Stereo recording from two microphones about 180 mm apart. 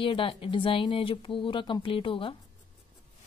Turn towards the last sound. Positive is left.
turn(degrees=30)  # may be behind; listen again after turning